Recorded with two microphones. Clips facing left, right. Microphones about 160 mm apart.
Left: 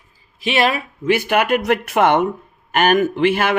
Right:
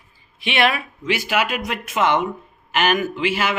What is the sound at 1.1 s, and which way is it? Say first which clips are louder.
Speech: left 5 dB; 55° left (ahead or behind).